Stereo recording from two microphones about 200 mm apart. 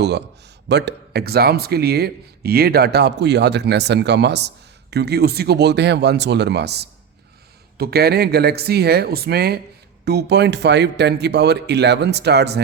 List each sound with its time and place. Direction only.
0.7 s speech: 55° right (ahead or behind)